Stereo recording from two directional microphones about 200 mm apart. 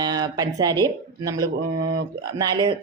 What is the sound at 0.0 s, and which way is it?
A woman's voice, 20° right (ahead or behind).